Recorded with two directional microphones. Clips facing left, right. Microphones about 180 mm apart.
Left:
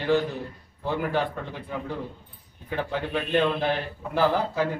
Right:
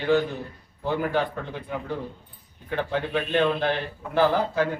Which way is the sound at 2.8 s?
Centre (ahead or behind).